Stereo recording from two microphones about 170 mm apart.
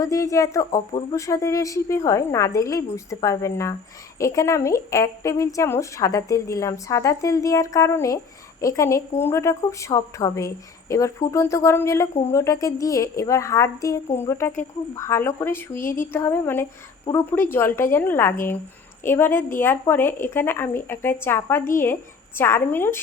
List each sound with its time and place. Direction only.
0.0 s a woman's voice: 20° left (ahead or behind)